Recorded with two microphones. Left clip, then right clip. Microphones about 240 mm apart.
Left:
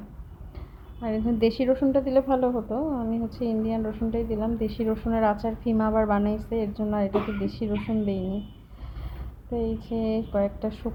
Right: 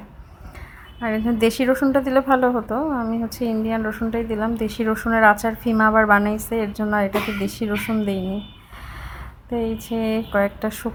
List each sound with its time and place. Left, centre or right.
1.0 s a woman's voice: right
2.5 s a woman's voice: right
3.4 s a woman's voice: right
9.5 s a woman's voice: right